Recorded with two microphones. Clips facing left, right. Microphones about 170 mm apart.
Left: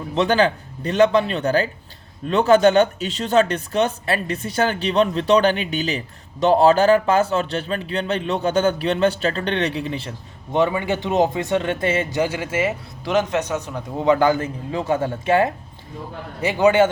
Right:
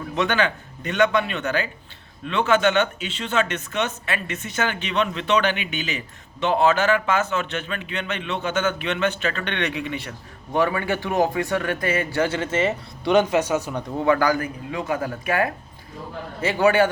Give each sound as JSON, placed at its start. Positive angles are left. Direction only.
{"t": 0.2, "sound": "a man's voice", "side_deg": 35}
{"t": 13.9, "sound": "speech", "side_deg": 20}